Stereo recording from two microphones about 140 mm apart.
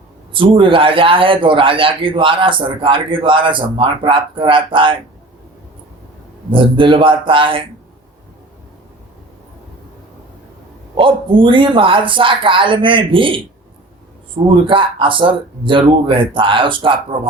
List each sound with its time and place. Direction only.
0.3 s a man's voice: 35° right (ahead or behind)
6.5 s a man's voice: 35° right (ahead or behind)
10.9 s a man's voice: 35° right (ahead or behind)